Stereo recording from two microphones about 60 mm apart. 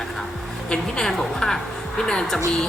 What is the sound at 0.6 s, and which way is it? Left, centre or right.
A man's voice, centre.